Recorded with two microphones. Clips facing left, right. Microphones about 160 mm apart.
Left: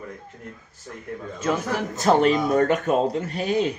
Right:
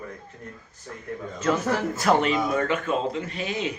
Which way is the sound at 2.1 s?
40° left (ahead or behind).